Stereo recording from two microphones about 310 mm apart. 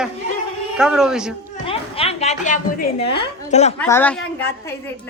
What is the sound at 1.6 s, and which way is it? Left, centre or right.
A woman's voice, centre.